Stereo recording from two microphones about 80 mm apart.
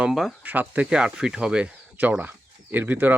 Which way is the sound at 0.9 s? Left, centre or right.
Centre.